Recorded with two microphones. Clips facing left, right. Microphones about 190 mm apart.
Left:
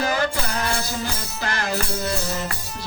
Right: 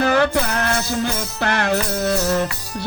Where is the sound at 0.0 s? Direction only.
65° right (ahead or behind).